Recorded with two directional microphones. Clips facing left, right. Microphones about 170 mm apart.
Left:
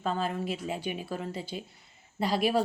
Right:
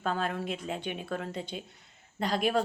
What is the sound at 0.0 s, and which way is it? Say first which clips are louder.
A woman's voice: left 1 dB; centre (ahead or behind).